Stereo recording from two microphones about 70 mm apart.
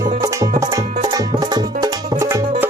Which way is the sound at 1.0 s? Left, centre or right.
Right.